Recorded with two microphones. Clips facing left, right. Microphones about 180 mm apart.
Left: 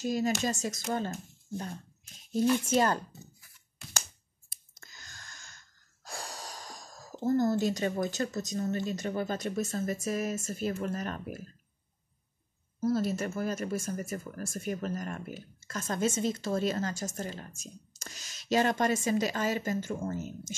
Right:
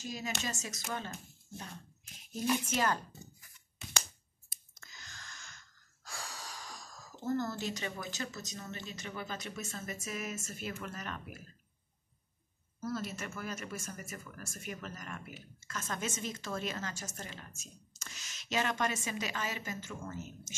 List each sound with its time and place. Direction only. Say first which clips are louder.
0.4 s speech: left 8 dB; 35° left (ahead or behind)
2.7 s speech: left 6 dB; 35° left (ahead or behind)
4.7 s a sound: left 1 dB; 40° left (ahead or behind)
6.0 s speech: left 5 dB; 50° left (ahead or behind)
12.8 s speech: left 9 dB; 35° left (ahead or behind)